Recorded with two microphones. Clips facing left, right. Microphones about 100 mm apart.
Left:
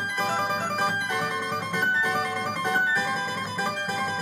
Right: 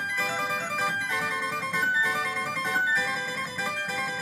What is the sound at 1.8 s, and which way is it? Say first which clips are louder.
Music: left 2 dB; 60° left (ahead or behind).